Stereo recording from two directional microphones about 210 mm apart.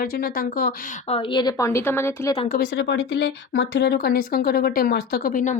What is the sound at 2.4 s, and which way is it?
Speech, 45° left (ahead or behind).